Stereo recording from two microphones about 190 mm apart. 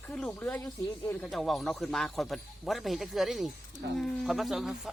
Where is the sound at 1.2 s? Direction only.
Centre (ahead or behind).